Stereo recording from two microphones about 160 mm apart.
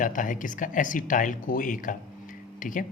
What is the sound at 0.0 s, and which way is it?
Speech, 55° left (ahead or behind).